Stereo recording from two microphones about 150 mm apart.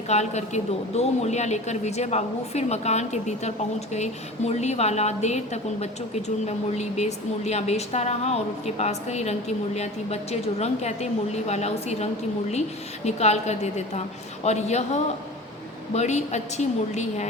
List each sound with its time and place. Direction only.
0.1 s speech: 50° left (ahead or behind)
13.1 s speech: 45° left (ahead or behind)